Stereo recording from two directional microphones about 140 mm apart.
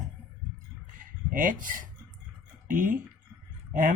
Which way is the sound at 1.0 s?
80° right.